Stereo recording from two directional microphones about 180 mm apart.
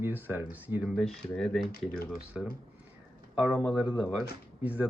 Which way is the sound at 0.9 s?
Centre (ahead or behind).